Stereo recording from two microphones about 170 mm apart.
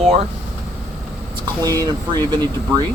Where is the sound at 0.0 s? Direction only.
40° right (ahead or behind).